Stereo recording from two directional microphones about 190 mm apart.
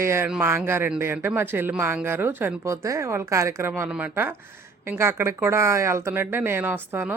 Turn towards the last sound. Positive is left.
turn(degrees=-10)  # may be behind; listen again after turning